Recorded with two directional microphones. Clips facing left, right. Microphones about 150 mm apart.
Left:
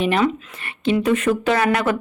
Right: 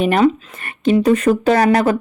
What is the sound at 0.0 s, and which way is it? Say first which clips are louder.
Speech: right 5 dB; 45° right (ahead or behind).